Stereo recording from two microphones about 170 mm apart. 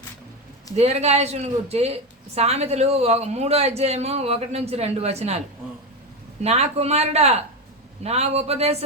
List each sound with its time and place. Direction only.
0.8 s speech: 40° right (ahead or behind)
6.4 s speech: 40° right (ahead or behind)